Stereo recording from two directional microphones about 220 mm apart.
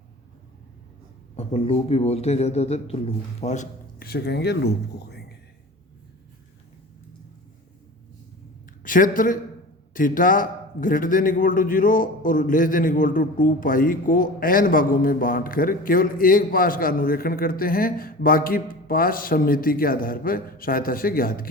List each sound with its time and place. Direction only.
1.4 s speech: 25° left (ahead or behind); by 5.2 s 50° left (ahead or behind)
8.8 s a woman's voice: 40° left (ahead or behind)